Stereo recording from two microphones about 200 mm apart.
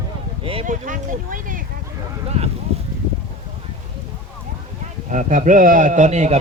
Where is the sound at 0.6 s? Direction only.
40° right (ahead or behind).